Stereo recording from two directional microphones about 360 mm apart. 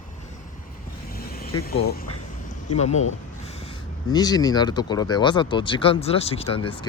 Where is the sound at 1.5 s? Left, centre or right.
Left.